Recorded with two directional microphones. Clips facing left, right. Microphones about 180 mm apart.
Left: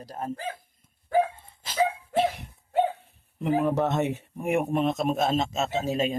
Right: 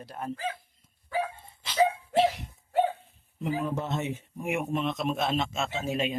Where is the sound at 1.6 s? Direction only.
50° left (ahead or behind).